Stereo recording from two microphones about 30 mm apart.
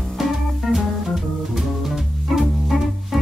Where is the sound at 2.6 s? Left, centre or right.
Centre.